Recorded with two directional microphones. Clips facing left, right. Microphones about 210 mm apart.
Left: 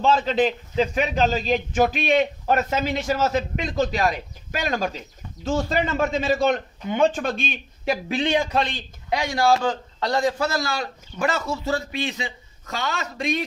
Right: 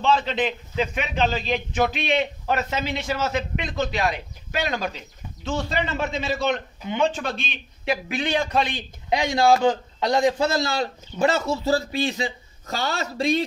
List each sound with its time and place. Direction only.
0.0 s a man's voice: 45° left (ahead or behind)
8.7 s a man's voice: 20° right (ahead or behind)